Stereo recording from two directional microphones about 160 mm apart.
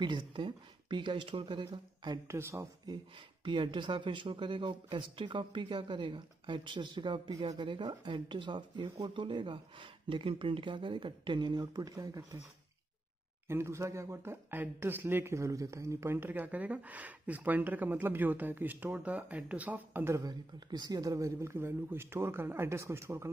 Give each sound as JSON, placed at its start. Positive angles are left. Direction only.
{"t": 0.0, "sound": "speech", "side_deg": -30}
{"t": 3.4, "sound": "speech", "side_deg": -30}
{"t": 13.5, "sound": "speech", "side_deg": -15}